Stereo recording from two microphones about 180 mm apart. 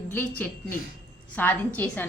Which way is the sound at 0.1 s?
10° left (ahead or behind).